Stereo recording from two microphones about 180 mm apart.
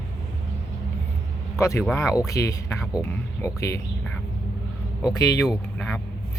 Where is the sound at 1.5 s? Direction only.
15° left (ahead or behind).